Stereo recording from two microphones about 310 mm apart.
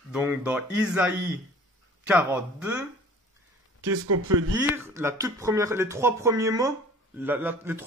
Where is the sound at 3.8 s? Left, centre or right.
Right.